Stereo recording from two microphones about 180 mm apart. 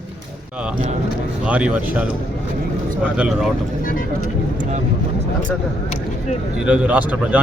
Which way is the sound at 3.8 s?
50° left (ahead or behind).